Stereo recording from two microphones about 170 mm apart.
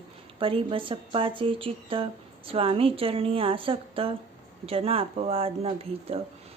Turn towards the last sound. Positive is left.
turn(degrees=-35)  # may be behind; listen again after turning